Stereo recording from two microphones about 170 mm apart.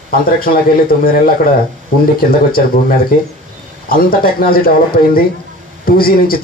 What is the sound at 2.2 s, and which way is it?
Speech, 60° left (ahead or behind).